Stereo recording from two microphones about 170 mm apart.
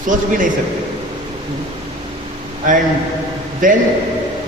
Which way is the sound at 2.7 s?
50° right (ahead or behind).